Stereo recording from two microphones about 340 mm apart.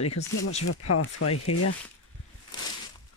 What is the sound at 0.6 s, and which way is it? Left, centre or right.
Speech, left.